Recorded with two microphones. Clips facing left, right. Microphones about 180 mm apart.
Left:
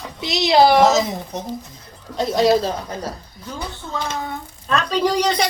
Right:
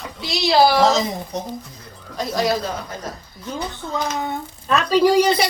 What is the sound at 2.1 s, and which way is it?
Speech, 25° left (ahead or behind).